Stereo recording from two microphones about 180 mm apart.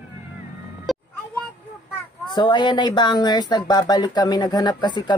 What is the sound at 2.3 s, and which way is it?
Speech, 25° left (ahead or behind).